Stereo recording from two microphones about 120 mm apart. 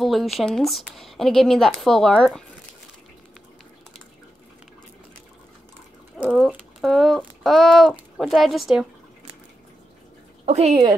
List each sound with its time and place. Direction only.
0.0 s speech: centre (ahead or behind)
6.3 s speech: centre (ahead or behind)
10.4 s speech: 60° right (ahead or behind)